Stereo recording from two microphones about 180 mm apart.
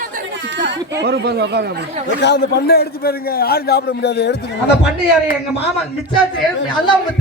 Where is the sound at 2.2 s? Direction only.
70° left (ahead or behind).